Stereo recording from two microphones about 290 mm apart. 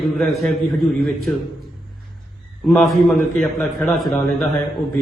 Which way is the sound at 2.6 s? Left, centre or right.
Centre.